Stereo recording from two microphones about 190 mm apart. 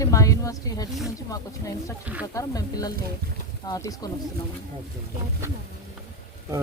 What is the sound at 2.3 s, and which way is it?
Speech, 20° left (ahead or behind).